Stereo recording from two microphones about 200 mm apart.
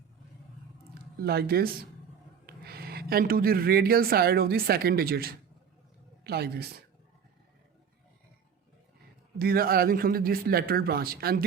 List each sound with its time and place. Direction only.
1.2 s speech: 50° right (ahead or behind)
9.4 s speech: 50° right (ahead or behind)